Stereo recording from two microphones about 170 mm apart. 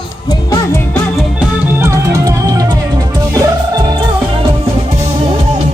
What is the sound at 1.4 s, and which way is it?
Music, 15° right (ahead or behind).